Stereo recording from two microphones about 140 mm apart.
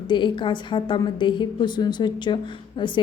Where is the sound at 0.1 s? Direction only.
35° left (ahead or behind).